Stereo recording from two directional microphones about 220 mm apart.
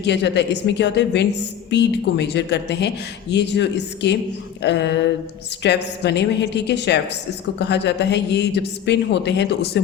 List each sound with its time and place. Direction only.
0.0 s a man's voice: 50° left (ahead or behind)